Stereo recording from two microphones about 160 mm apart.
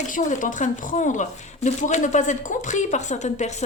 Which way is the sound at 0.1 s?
55° left (ahead or behind).